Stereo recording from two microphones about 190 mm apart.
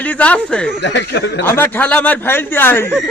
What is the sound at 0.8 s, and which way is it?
Speech, 70° left (ahead or behind).